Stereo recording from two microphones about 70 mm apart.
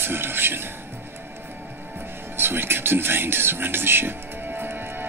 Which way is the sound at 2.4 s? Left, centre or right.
Right.